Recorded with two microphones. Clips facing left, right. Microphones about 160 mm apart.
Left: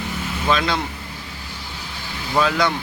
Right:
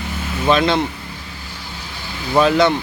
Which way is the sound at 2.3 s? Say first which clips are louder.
Right 6 dB; 25° right (ahead or behind).